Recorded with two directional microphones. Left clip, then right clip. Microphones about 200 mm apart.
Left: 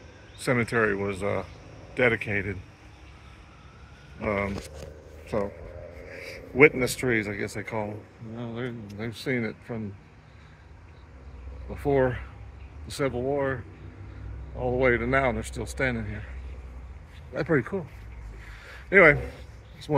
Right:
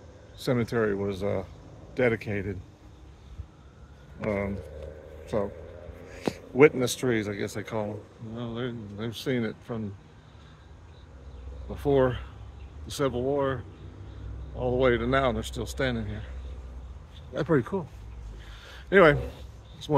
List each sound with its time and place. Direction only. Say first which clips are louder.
0.4 s speech: left 3 dB; 20° right (ahead or behind)
5.2 s vehicle: even; 10° right (ahead or behind)
6.1 s a man's voice: even; 10° right (ahead or behind)
11.7 s speech: even; 10° right (ahead or behind)
14.6 s a man's voice: left 1 dB; 10° right (ahead or behind)
17.3 s speech: even; 15° right (ahead or behind)
18.7 s a sound: left 2 dB; 20° right (ahead or behind)